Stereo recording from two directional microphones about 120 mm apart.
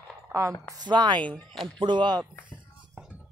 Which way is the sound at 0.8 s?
40° right (ahead or behind).